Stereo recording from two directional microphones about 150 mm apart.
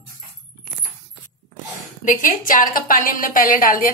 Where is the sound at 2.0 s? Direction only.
65° left (ahead or behind).